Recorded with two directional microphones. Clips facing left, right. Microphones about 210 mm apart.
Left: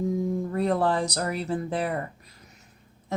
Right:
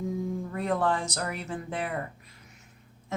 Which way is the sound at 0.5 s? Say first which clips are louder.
Left 3 dB; 35° left (ahead or behind).